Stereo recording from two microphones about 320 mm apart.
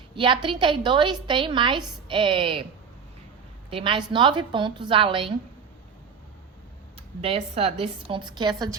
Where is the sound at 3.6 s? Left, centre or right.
Centre.